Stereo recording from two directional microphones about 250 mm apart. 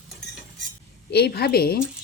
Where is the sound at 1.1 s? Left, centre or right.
Left.